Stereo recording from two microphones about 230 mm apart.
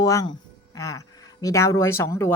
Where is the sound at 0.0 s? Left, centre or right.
Centre.